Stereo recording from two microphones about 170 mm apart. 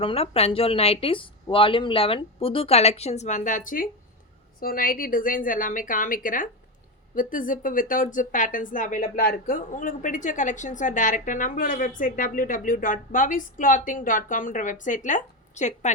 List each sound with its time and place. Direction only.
0.0 s a woman's voice: 35° left (ahead or behind)